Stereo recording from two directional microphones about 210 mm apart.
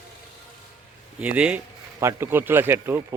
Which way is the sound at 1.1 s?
5° right (ahead or behind).